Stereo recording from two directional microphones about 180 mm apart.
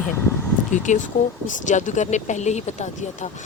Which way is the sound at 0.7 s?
45° left (ahead or behind).